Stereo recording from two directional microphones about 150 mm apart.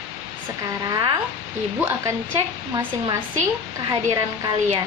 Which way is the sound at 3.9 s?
25° right (ahead or behind).